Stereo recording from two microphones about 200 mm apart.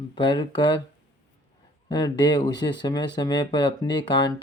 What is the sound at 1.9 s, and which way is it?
Speech, 20° left (ahead or behind).